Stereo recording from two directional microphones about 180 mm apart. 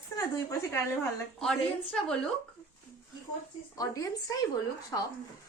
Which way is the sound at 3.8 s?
20° left (ahead or behind).